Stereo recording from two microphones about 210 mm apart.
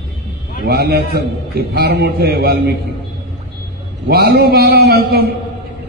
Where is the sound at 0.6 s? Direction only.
50° right (ahead or behind).